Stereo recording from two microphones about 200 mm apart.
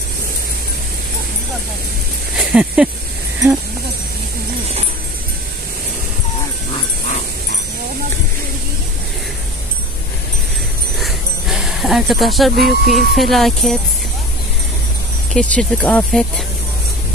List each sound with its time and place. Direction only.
2.5 s speech: 5° right (ahead or behind)
11.0 s a sound: centre (ahead or behind)
12.5 s speech: 50° right (ahead or behind)
13.1 s speech: centre (ahead or behind)
15.3 s speech: 5° left (ahead or behind)